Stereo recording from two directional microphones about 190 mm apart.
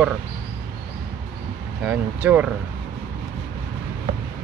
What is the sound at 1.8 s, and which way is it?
Speech, 5° right (ahead or behind).